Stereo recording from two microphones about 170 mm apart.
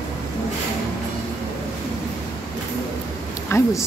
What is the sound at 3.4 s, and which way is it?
Speech, 15° left (ahead or behind).